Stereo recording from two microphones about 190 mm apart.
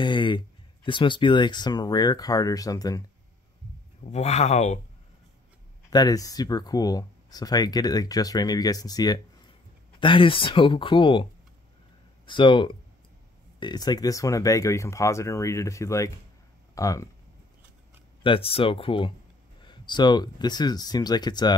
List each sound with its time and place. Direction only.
0.0 s a sound: 25° left (ahead or behind)
0.8 s speech: 25° left (ahead or behind)
4.0 s speech: 35° left (ahead or behind)
5.9 s speech: 20° left (ahead or behind)
12.3 s speech: 25° left (ahead or behind)
18.2 s speech: 30° left (ahead or behind)